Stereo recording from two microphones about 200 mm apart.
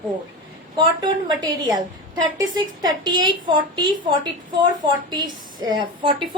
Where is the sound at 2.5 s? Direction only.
20° right (ahead or behind).